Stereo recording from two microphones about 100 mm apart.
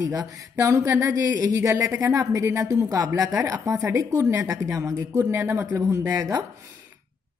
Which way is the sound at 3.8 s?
20° right (ahead or behind).